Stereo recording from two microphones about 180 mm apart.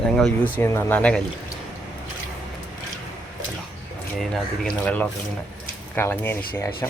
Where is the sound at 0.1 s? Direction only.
5° left (ahead or behind).